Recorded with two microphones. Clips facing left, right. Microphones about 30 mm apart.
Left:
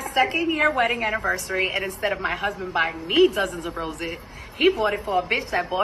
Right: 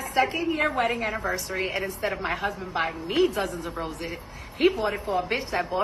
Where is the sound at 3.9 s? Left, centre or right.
Left.